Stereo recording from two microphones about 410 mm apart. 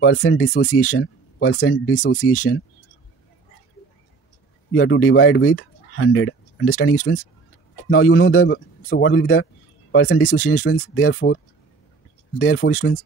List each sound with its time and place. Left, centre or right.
0.0 s speech: left
4.7 s a man's voice: left
12.4 s a man's voice: left